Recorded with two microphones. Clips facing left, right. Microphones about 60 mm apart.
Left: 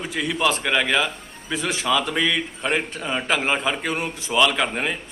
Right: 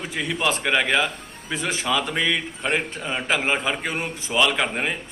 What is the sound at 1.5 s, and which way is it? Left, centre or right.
Speech, right.